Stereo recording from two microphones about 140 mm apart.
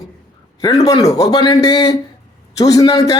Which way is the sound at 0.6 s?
30° left (ahead or behind).